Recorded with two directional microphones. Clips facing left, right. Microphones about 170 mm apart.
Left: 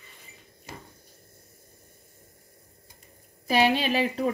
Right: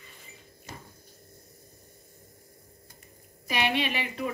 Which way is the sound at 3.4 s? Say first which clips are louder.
Left 6 dB; 35° left (ahead or behind).